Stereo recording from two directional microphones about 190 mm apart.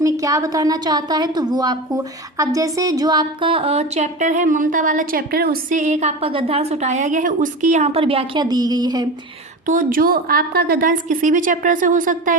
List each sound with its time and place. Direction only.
0.0 s a woman's voice: 15° right (ahead or behind)
9.6 s a woman's voice: 45° right (ahead or behind)